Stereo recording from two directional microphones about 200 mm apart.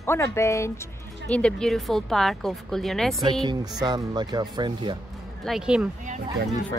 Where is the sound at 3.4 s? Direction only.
20° right (ahead or behind).